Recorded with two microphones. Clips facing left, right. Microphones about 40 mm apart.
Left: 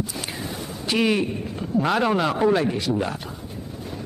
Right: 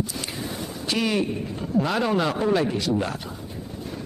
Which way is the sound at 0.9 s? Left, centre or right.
Centre.